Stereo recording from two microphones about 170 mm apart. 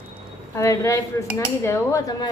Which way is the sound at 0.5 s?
15° left (ahead or behind).